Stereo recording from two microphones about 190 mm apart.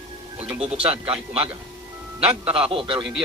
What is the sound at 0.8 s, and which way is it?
A man's voice, 30° right (ahead or behind).